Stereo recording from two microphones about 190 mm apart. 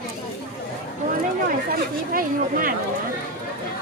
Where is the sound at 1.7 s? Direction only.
45° right (ahead or behind).